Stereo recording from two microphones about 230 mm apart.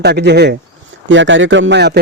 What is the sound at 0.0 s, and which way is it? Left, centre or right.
A man's voice, right.